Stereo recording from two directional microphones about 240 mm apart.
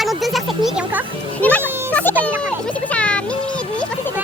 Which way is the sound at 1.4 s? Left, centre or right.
Centre.